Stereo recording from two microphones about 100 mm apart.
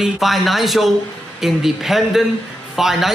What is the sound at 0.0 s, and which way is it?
Speech, centre (ahead or behind).